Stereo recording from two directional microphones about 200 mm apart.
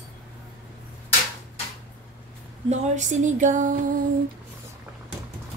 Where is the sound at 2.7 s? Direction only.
35° right (ahead or behind).